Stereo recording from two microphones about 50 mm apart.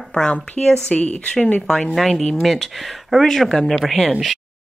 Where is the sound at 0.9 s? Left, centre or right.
Left.